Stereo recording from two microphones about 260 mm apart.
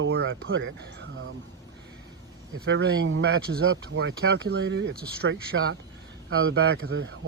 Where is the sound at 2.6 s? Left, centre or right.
Right.